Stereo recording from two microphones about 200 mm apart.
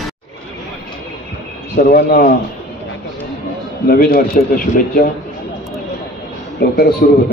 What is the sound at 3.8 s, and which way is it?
Speech, 45° left (ahead or behind).